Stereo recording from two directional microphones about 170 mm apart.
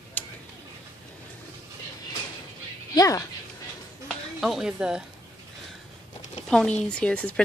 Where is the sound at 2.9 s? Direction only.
20° left (ahead or behind).